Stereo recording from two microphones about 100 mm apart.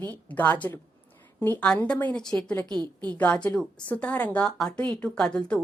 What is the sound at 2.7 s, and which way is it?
Speech, 45° right (ahead or behind).